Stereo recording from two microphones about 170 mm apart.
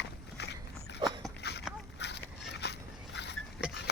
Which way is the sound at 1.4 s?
80° left.